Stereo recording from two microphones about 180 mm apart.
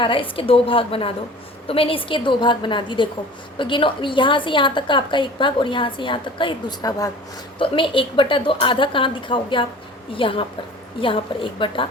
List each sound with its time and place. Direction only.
0.0 s a woman's voice: 30° left (ahead or behind)